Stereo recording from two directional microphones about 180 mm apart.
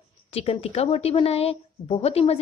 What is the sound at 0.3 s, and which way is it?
A woman's voice, 35° left (ahead or behind).